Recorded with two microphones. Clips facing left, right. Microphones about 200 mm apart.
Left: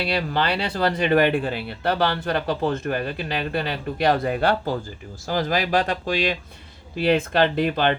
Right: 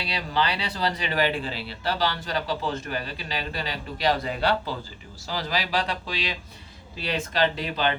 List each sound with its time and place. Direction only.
0.0 s speech: 55° left (ahead or behind)